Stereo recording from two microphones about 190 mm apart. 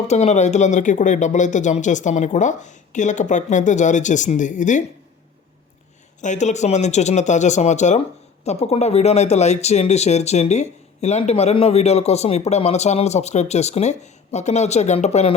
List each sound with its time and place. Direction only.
0.1 s speech: 35° left (ahead or behind)
6.2 s speech: 40° left (ahead or behind)